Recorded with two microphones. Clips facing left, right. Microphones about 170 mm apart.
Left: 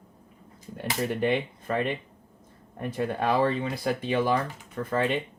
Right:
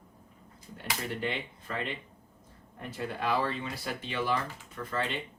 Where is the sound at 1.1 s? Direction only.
50° left (ahead or behind).